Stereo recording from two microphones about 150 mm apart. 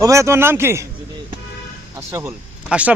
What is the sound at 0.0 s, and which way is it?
Speech, 20° right (ahead or behind).